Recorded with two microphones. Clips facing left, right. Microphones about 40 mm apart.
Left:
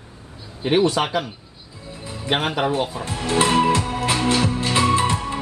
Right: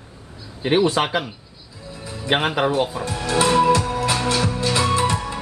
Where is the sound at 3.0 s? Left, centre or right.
Left.